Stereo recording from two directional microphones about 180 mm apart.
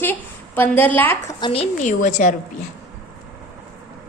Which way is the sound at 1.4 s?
30° left (ahead or behind).